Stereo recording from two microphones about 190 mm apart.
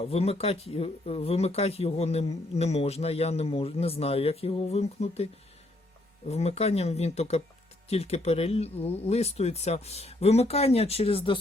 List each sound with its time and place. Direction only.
0.0 s speech: 35° left (ahead or behind)